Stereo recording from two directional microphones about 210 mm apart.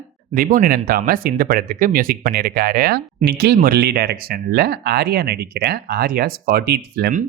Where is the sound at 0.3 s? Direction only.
40° right (ahead or behind).